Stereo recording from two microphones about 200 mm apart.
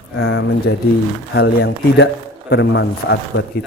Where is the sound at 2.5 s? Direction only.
65° left (ahead or behind).